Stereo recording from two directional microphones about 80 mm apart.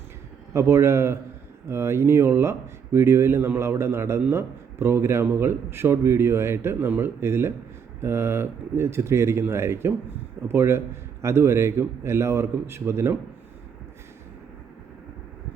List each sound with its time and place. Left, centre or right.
0.5 s a man's voice: right